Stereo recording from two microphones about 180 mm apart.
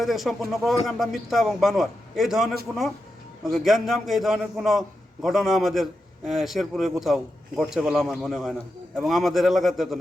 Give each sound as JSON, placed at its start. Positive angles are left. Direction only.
{"t": 0.0, "sound": "a man's voice", "side_deg": 0}